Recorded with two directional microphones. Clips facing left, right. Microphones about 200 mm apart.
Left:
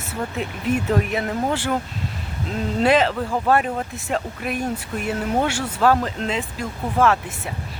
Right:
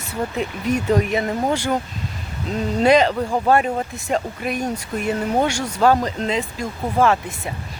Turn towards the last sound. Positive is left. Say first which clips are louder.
# right 1 dB
turn(degrees=0)  # may be behind; listen again after turning